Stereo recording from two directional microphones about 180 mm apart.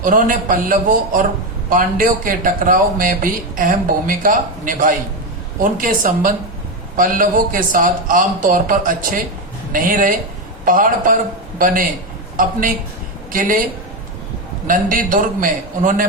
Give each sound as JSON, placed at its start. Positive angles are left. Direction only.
{"t": 0.0, "sound": "a man's voice", "side_deg": -50}
{"t": 14.7, "sound": "a man's voice", "side_deg": -50}